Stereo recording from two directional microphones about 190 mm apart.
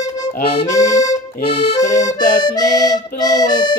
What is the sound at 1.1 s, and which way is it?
Accordion, 30° left (ahead or behind).